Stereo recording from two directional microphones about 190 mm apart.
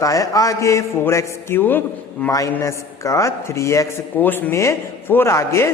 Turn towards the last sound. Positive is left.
turn(degrees=15)  # may be behind; listen again after turning